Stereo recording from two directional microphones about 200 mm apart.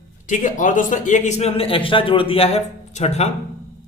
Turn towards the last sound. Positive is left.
turn(degrees=35)  # may be behind; listen again after turning